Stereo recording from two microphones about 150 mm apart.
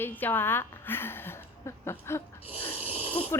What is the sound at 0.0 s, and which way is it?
A woman's voice, 10° left (ahead or behind).